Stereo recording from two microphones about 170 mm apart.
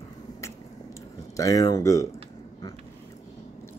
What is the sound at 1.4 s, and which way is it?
Speech, 20° left (ahead or behind).